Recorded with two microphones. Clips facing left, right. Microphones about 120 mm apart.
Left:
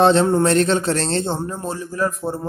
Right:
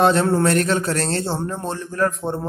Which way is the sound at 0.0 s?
25° left (ahead or behind).